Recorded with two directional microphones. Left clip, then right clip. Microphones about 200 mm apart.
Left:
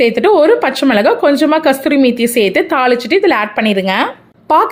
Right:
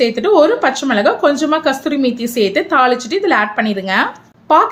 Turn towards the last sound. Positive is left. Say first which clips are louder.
# even
turn(degrees=40)  # may be behind; listen again after turning